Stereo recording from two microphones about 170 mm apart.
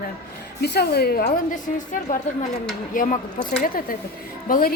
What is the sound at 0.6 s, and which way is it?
A woman's voice, 75° left (ahead or behind).